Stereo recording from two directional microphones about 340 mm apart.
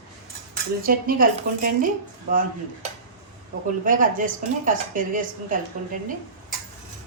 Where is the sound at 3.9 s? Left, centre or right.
Right.